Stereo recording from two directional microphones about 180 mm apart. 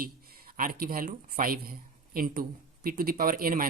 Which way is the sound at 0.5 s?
50° right (ahead or behind).